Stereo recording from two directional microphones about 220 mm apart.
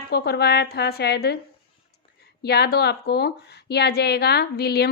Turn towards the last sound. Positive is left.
turn(degrees=45)  # may be behind; listen again after turning